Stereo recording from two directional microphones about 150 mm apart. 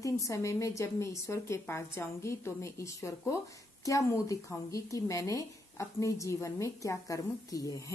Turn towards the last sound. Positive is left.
turn(degrees=25)  # may be behind; listen again after turning